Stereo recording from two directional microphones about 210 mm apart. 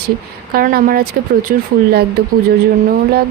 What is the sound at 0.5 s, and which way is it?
Speech, 45° right (ahead or behind).